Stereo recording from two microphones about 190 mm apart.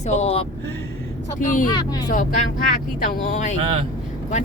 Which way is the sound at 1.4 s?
45° left (ahead or behind).